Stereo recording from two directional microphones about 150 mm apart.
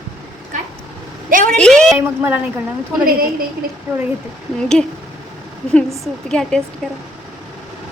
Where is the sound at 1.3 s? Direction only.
60° right (ahead or behind).